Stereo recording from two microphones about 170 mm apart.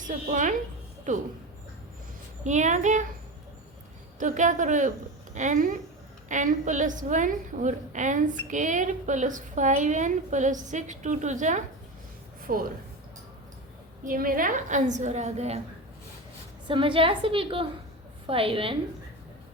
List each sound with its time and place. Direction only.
0.1 s a woman's voice: 45° right (ahead or behind)
2.4 s a woman's voice: 45° right (ahead or behind)
4.2 s a woman's voice: 50° right (ahead or behind)
12.4 s speech: 60° right (ahead or behind)
14.0 s a woman's voice: 55° right (ahead or behind); by 15.6 s 40° right (ahead or behind)
16.6 s a woman's voice: 30° right (ahead or behind)